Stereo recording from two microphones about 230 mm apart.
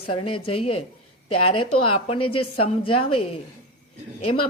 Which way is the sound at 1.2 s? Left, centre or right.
Left.